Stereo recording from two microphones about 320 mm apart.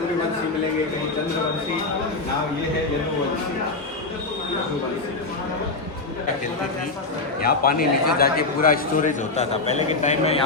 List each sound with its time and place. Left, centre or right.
7.4 s a man's voice: left